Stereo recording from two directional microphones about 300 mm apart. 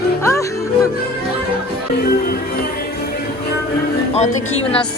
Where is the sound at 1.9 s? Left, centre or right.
Left.